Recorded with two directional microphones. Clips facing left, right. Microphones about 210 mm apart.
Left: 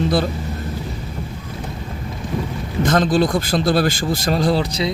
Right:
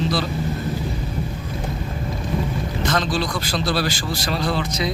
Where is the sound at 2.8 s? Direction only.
50° left (ahead or behind); by 4.9 s 35° left (ahead or behind).